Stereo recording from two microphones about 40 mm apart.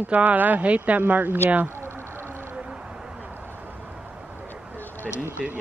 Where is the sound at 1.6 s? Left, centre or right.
Right.